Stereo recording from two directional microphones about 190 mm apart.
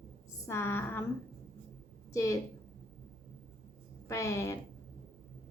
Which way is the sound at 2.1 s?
15° left (ahead or behind).